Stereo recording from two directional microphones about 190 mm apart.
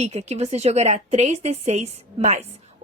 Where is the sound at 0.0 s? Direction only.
35° right (ahead or behind).